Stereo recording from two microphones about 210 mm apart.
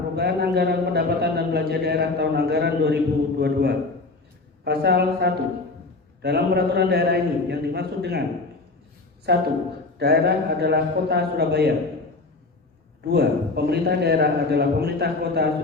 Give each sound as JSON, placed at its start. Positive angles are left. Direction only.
{"t": 0.2, "sound": "a man's voice", "side_deg": -50}
{"t": 9.3, "sound": "a man's voice", "side_deg": -50}
{"t": 13.1, "sound": "a man's voice", "side_deg": -50}